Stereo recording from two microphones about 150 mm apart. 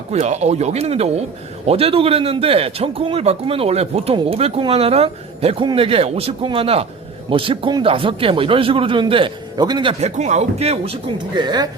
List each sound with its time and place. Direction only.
0.1 s a man's voice: 45° right (ahead or behind); by 9.9 s 30° right (ahead or behind)
10.0 s a man's voice: 50° right (ahead or behind); by 11.7 s 30° right (ahead or behind)